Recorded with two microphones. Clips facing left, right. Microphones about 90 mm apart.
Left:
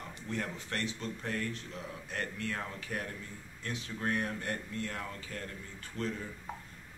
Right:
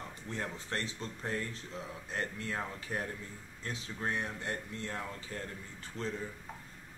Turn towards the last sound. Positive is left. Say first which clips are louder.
# left 2 dB
turn(degrees=-25)  # may be behind; listen again after turning